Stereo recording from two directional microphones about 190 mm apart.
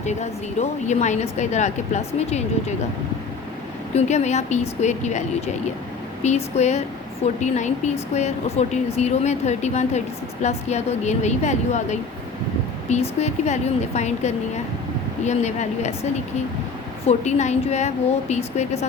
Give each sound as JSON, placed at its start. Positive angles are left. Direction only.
{"t": 0.0, "sound": "speech", "side_deg": 35}
{"t": 3.9, "sound": "speech", "side_deg": 35}
{"t": 6.2, "sound": "speech", "side_deg": 35}
{"t": 17.1, "sound": "speech", "side_deg": 35}